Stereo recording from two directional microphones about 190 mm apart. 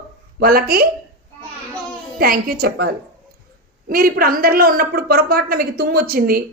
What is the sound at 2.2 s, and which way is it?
A woman's voice, 50° right (ahead or behind).